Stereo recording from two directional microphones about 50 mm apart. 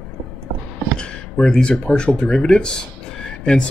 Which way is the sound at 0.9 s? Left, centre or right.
Centre.